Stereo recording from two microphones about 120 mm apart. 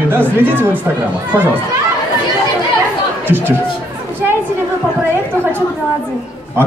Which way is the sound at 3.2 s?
20° right (ahead or behind).